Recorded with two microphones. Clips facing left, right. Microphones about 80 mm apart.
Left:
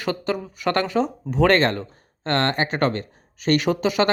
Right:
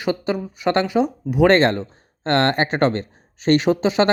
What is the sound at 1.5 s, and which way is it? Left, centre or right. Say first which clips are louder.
Speech: right 3 dB; right.